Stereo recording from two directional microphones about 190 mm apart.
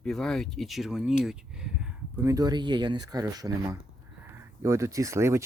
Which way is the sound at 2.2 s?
20° right (ahead or behind).